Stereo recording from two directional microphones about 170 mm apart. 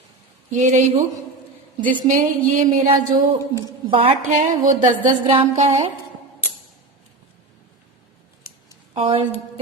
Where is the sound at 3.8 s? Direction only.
35° right (ahead or behind).